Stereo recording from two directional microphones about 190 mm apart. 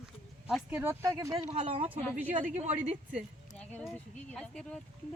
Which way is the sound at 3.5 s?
5° left (ahead or behind).